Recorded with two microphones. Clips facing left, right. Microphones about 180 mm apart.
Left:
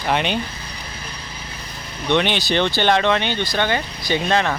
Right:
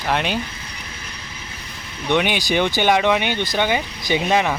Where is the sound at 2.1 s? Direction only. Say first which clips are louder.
Even; 10° right (ahead or behind).